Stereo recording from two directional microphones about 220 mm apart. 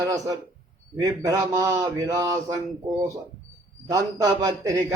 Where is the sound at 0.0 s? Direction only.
15° right (ahead or behind).